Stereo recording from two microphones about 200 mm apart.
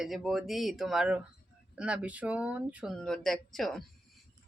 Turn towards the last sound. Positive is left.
turn(degrees=0)  # may be behind; listen again after turning